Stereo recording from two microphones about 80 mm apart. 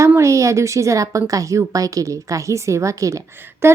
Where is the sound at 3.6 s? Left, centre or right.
Right.